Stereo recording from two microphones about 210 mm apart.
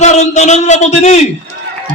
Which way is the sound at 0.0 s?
35° left (ahead or behind).